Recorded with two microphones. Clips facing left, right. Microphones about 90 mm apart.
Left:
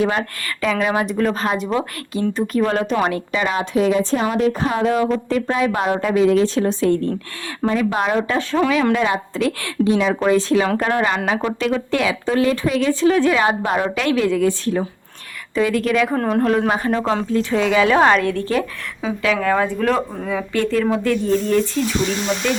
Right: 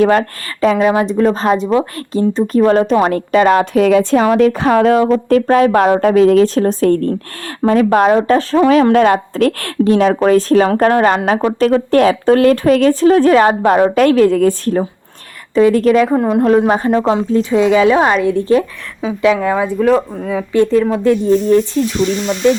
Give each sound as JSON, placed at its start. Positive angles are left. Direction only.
{"t": 0.0, "sound": "a woman's voice", "side_deg": -50}
{"t": 0.6, "sound": "speech", "side_deg": -30}
{"t": 3.1, "sound": "a woman's voice", "side_deg": -50}
{"t": 4.9, "sound": "a woman's voice", "side_deg": -55}
{"t": 15.5, "sound": "speech", "side_deg": -35}
{"t": 16.0, "sound": "speech", "side_deg": -10}
{"t": 16.4, "sound": "speech", "side_deg": -25}
{"t": 16.9, "sound": "speech", "side_deg": -20}
{"t": 20.5, "sound": "speech", "side_deg": -20}